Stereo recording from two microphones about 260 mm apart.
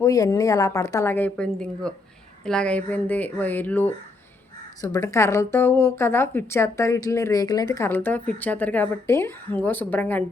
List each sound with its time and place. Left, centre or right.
0.0 s a woman's voice: centre